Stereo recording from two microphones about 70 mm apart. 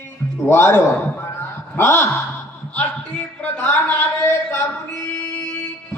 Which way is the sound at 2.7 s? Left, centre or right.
Left.